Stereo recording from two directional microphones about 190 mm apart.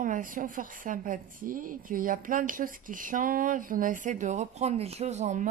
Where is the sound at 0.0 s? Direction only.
45° right (ahead or behind).